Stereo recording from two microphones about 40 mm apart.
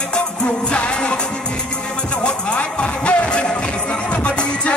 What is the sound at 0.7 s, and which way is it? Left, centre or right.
Music, left.